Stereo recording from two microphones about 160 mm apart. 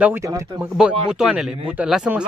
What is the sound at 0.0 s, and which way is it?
Speech, 15° right (ahead or behind).